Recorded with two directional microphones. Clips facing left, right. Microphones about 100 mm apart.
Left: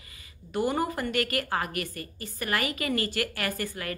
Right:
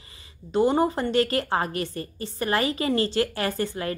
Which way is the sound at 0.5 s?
25° right (ahead or behind).